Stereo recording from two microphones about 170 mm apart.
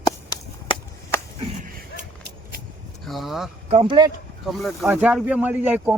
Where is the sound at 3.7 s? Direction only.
30° right (ahead or behind).